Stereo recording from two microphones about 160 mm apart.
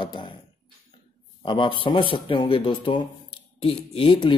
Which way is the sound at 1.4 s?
30° left (ahead or behind).